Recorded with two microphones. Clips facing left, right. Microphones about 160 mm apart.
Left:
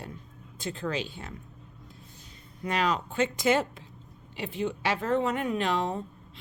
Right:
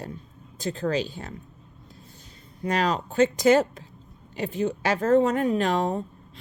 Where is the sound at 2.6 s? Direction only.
40° right (ahead or behind).